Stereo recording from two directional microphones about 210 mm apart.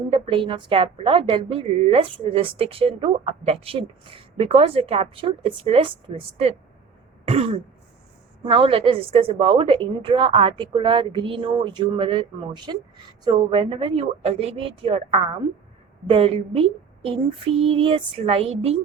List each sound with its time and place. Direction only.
0.1 s a woman's voice: 25° right (ahead or behind)